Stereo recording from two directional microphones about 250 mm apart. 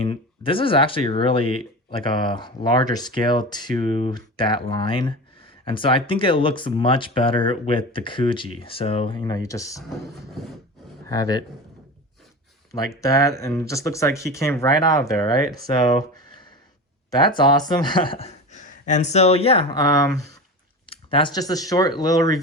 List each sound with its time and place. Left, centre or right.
0.0 s speech: left
11.0 s a man's voice: centre
13.0 s speech: centre